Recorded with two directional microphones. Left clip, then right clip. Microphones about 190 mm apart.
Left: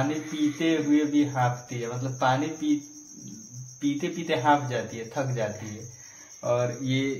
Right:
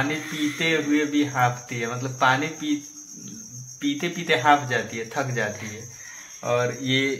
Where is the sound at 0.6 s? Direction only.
20° right (ahead or behind).